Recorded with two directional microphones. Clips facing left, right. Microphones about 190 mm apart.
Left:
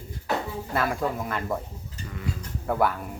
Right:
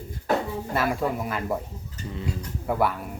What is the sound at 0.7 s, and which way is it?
Speech, 5° right (ahead or behind).